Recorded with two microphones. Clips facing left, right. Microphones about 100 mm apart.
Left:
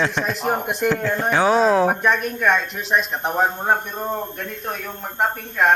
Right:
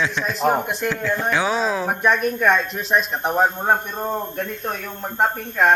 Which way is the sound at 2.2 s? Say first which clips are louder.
Right 1 dB; 20° right (ahead or behind).